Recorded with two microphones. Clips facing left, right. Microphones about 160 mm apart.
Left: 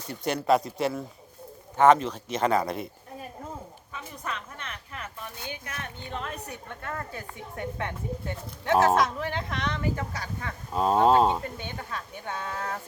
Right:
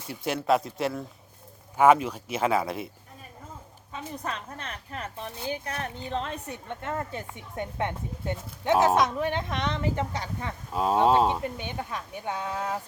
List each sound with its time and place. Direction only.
0.1 s speech: centre (ahead or behind)
3.9 s a woman's voice: 35° right (ahead or behind)
10.7 s speech: centre (ahead or behind)
11.4 s speech: 15° right (ahead or behind)